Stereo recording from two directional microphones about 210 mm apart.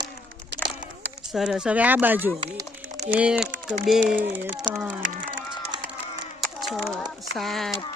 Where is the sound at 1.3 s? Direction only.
5° right (ahead or behind).